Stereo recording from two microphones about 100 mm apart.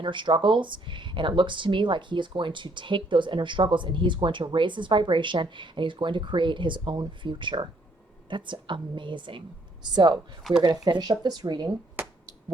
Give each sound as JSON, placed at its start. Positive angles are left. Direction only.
{"t": 0.0, "sound": "speech", "side_deg": -55}
{"t": 10.5, "sound": "speech", "side_deg": 0}
{"t": 10.8, "sound": "speech", "side_deg": -45}
{"t": 12.0, "sound": "finger snapping", "side_deg": -20}